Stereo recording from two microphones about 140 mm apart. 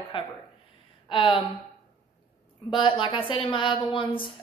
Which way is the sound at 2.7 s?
35° left (ahead or behind).